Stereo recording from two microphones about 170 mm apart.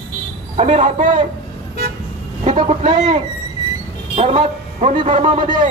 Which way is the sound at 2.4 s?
40° right (ahead or behind).